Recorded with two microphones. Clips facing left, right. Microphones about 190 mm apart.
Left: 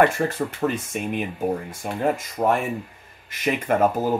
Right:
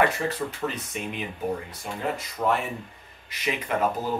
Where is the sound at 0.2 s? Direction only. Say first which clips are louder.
Left 5 dB; 45° left (ahead or behind).